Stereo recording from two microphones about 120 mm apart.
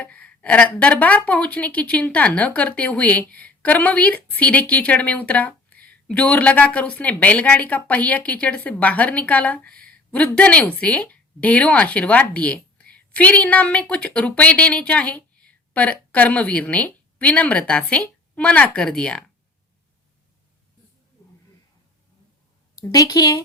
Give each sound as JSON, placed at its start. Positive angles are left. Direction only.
{"t": 0.0, "sound": "a woman's voice", "side_deg": 10}
{"t": 22.8, "sound": "a woman's voice", "side_deg": 30}